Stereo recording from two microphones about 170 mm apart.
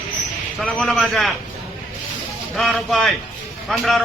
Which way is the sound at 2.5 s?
Centre (ahead or behind).